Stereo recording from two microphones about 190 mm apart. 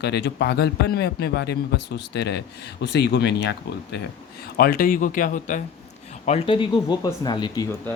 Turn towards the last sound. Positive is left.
turn(degrees=20)  # may be behind; listen again after turning